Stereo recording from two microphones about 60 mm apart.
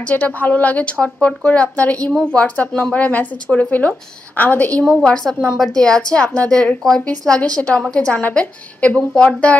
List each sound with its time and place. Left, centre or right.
0.0 s speech: left
5.6 s a woman's voice: centre